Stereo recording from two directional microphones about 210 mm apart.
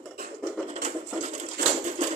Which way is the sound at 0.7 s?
30° right (ahead or behind).